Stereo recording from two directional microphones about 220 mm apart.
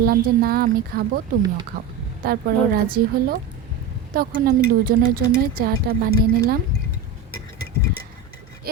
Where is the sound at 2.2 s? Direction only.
40° right (ahead or behind).